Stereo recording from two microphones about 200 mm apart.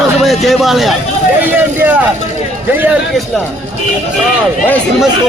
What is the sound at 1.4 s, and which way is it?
Vehicle, 10° right (ahead or behind).